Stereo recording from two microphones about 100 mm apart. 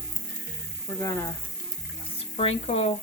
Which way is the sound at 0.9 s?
35° left (ahead or behind).